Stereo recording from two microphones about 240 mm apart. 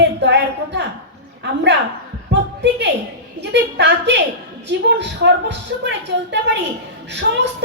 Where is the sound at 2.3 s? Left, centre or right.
Right.